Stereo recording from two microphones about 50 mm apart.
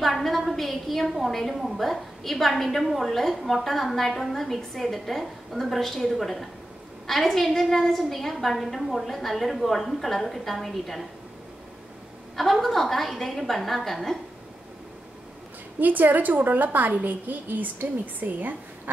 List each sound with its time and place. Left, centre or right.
0.0 s a woman's voice: centre
12.4 s a woman's voice: centre
15.8 s a woman's voice: right